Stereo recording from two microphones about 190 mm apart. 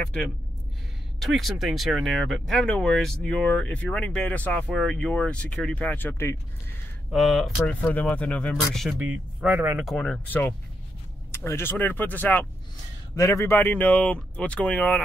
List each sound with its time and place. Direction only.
0.0 s speech: 5° left (ahead or behind)
7.1 s speech: centre (ahead or behind)
9.8 s speech: 5° left (ahead or behind)